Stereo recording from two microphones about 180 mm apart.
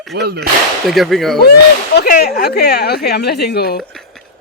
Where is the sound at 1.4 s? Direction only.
60° left (ahead or behind).